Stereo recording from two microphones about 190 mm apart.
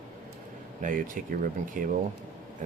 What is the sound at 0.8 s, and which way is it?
Speech, 45° right (ahead or behind).